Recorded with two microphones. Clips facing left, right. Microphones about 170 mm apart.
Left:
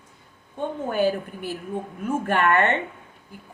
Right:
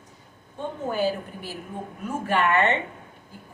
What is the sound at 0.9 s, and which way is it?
A woman's voice, 55° left (ahead or behind).